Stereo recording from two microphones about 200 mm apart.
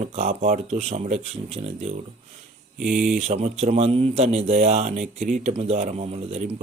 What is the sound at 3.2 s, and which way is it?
Speech, 30° right (ahead or behind).